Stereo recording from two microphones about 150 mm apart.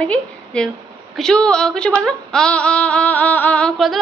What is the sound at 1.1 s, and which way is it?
Speech, 5° left (ahead or behind).